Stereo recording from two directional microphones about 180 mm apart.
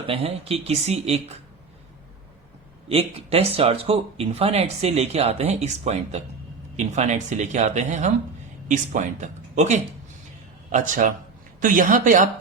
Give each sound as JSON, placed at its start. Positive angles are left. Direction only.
{"t": 0.1, "sound": "speech", "side_deg": -35}
{"t": 2.9, "sound": "speech", "side_deg": -35}